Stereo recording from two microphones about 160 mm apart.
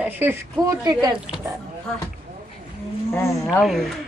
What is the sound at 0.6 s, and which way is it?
Speech, 25° right (ahead or behind).